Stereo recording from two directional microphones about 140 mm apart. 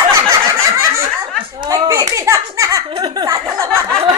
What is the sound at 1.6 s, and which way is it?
Giggle, 25° right (ahead or behind).